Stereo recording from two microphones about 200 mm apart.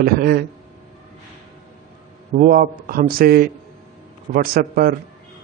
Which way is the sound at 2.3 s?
45° right (ahead or behind).